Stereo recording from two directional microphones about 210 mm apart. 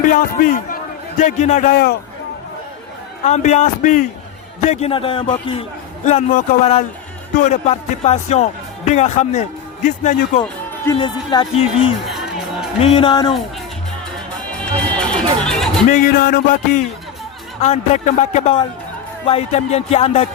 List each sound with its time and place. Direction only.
0.1 s speech: 40° left (ahead or behind)
3.2 s speech: 35° left (ahead or behind)
4.6 s music: 30° left (ahead or behind)
6.1 s speech: 35° left (ahead or behind)
11.0 s music: 20° left (ahead or behind)
12.0 s music: centre (ahead or behind)
12.8 s music: 25° left (ahead or behind)
14.6 s music: 5° left (ahead or behind)
15.9 s speech: 40° left (ahead or behind)
19.2 s music: 30° left (ahead or behind)